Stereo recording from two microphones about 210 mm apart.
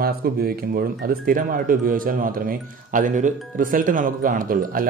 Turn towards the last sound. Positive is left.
turn(degrees=-40)  # may be behind; listen again after turning